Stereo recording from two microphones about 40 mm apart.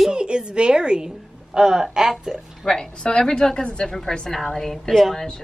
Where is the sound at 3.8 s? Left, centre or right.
Centre.